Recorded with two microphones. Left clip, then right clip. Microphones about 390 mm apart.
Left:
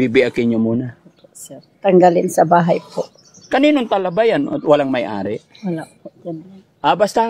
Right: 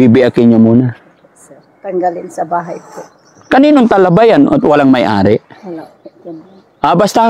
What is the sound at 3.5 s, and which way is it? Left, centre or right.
Speech, right.